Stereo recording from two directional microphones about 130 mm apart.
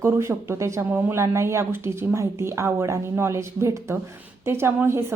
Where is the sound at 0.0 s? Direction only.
20° right (ahead or behind).